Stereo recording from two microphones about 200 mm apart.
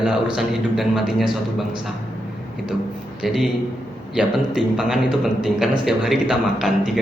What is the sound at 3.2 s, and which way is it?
A man's voice, centre (ahead or behind).